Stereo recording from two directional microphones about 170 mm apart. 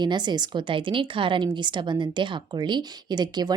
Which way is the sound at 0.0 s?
25° right (ahead or behind).